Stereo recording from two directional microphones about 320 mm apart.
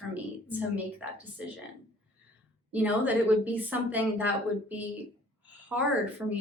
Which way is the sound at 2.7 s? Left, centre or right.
Centre.